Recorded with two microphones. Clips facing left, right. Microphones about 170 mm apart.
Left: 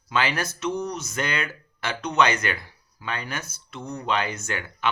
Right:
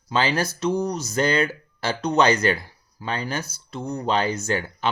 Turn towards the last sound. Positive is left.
turn(degrees=-30)  # may be behind; listen again after turning